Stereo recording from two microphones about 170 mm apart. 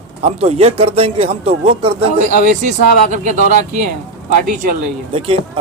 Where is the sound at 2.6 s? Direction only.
45° right (ahead or behind).